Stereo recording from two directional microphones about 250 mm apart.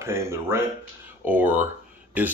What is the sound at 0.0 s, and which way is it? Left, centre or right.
Speech, centre.